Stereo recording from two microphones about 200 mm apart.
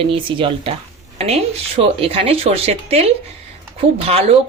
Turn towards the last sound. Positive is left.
turn(degrees=-30)  # may be behind; listen again after turning